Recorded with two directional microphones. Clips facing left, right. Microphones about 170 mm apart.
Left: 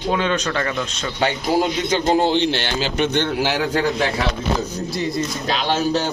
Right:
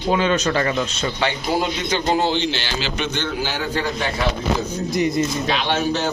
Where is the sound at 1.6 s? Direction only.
45° left (ahead or behind).